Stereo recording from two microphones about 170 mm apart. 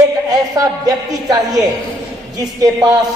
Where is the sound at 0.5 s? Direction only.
20° right (ahead or behind).